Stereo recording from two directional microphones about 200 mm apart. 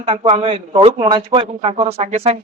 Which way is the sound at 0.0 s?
30° right (ahead or behind).